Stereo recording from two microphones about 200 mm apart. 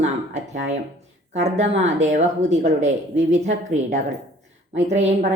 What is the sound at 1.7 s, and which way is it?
A woman's voice, 35° right (ahead or behind).